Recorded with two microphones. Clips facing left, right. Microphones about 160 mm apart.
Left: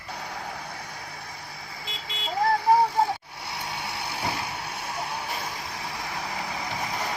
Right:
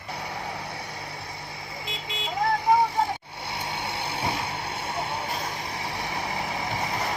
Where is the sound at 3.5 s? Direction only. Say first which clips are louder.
Right 2 dB; 25° right (ahead or behind).